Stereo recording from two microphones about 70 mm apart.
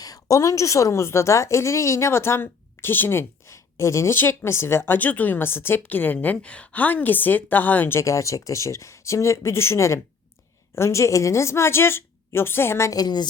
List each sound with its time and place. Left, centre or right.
0.0 s a woman's voice: left
4.1 s a woman's voice: left
7.9 s a woman's voice: left
12.9 s a woman's voice: left